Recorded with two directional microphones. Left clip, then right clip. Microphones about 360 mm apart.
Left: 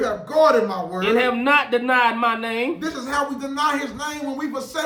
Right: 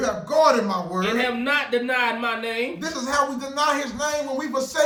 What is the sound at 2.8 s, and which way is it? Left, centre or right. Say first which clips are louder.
Speech: right 1 dB; centre.